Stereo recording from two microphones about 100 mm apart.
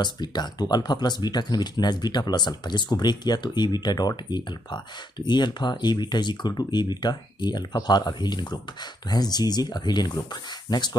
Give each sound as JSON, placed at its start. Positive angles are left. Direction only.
{"t": 0.0, "sound": "speech", "side_deg": 45}